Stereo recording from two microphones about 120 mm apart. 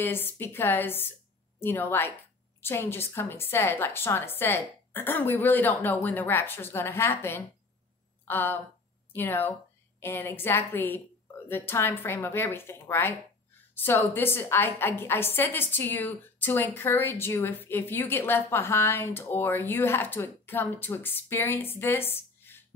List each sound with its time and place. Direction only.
0.0 s a woman's voice: 20° left (ahead or behind)